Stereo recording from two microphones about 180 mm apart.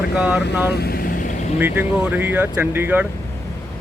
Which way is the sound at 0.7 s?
60° left (ahead or behind).